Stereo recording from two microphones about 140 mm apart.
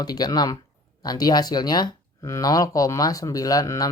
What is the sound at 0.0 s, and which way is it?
Speech, 30° left (ahead or behind).